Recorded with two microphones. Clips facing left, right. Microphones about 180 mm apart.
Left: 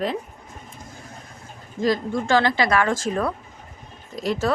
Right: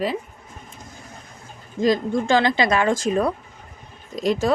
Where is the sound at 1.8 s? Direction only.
20° right (ahead or behind).